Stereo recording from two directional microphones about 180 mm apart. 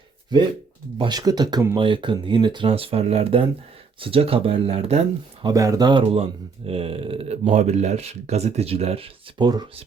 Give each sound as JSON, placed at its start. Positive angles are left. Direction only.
{"t": 0.9, "sound": "speech", "side_deg": -25}
{"t": 5.5, "sound": "speech", "side_deg": -20}